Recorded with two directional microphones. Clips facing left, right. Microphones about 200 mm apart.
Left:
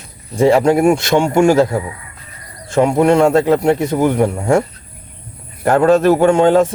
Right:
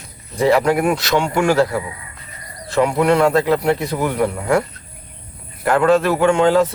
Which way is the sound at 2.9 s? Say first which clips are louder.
Left 4 dB; 25° left (ahead or behind).